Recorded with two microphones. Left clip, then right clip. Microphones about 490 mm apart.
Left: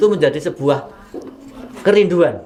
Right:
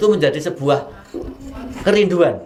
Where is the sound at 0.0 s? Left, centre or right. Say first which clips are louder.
Left 1 dB; left.